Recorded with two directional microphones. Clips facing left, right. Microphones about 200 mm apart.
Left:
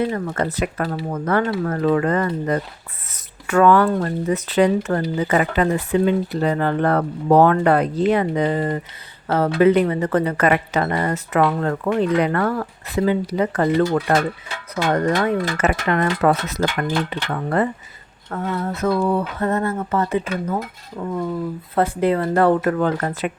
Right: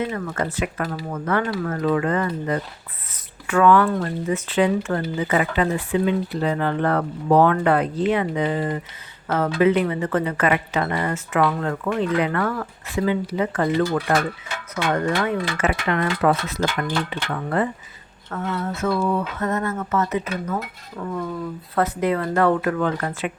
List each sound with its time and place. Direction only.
0.0 s speech: 40° left (ahead or behind)
14.9 s speech: 40° left (ahead or behind)
21.0 s speech: 20° left (ahead or behind)
21.8 s speech: 30° left (ahead or behind)